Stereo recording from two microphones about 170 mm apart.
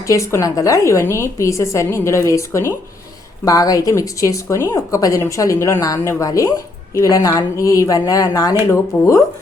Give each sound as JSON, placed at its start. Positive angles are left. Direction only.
{"t": 0.1, "sound": "a woman's voice", "side_deg": 15}